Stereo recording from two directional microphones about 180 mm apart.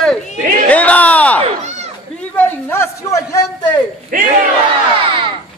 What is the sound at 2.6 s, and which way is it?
Speech, 15° left (ahead or behind).